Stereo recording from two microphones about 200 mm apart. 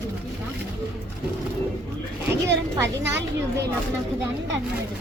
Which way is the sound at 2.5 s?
60° right (ahead or behind).